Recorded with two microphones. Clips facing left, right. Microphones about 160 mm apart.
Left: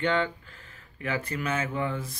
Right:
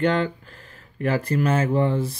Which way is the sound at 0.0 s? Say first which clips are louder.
Right 5 dB; 40° right (ahead or behind).